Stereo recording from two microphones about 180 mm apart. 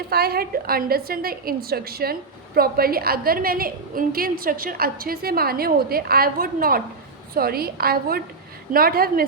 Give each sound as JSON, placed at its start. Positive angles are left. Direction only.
{"t": 0.1, "sound": "a woman's voice", "side_deg": -60}